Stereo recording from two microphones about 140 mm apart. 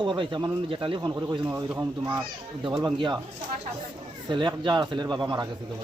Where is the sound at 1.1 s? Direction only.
20° right (ahead or behind).